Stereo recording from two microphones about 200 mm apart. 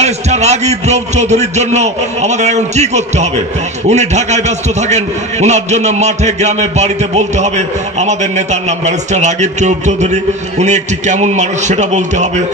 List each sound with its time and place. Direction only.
0.0 s a man's voice: 35° right (ahead or behind)